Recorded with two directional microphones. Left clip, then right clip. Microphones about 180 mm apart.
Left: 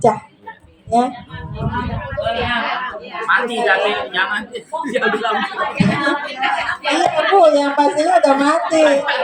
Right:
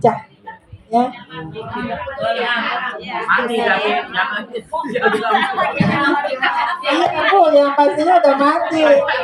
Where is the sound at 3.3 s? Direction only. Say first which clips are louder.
Left 1 dB; 50° left (ahead or behind).